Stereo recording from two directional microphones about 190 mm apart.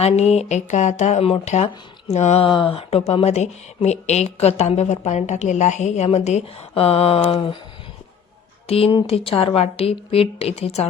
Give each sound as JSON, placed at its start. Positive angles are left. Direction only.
{"t": 0.0, "sound": "speech", "side_deg": 35}
{"t": 7.3, "sound": "a sound", "side_deg": 30}
{"t": 8.6, "sound": "speech", "side_deg": 30}